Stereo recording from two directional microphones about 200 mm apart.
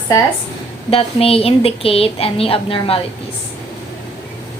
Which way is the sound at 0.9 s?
30° left (ahead or behind).